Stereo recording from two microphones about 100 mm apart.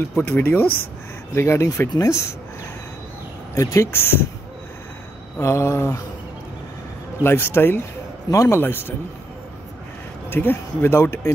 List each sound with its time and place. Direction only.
0.1 s speech: 20° left (ahead or behind)
3.5 s speech: 30° left (ahead or behind)
5.4 s speech: 30° left (ahead or behind)
7.2 s speech: 25° left (ahead or behind)
8.3 s speech: 35° left (ahead or behind)
8.5 s speech: 20° left (ahead or behind)
10.3 s speech: 25° left (ahead or behind)